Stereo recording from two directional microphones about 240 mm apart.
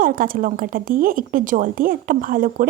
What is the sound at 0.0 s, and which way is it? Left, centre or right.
A woman's voice, right.